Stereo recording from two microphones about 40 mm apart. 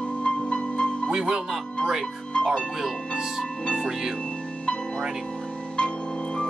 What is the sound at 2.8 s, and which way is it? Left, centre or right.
Speech, centre.